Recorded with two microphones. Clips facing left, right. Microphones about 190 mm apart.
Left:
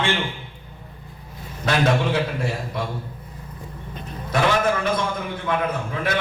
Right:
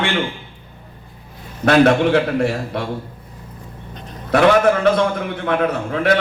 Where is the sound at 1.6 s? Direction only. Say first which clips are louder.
Right 8 dB; 65° right (ahead or behind).